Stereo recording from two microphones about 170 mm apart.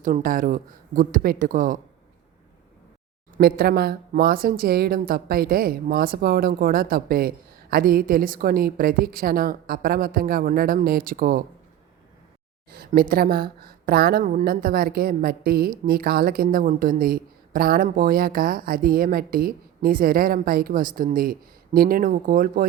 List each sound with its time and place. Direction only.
0.0 s speech: 50° right (ahead or behind)
3.3 s speech: 60° right (ahead or behind)
12.7 s speech: 60° right (ahead or behind)